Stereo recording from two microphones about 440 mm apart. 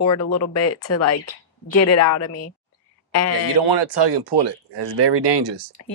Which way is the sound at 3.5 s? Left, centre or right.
Right.